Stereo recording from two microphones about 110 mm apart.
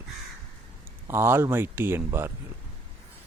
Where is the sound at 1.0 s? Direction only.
20° right (ahead or behind).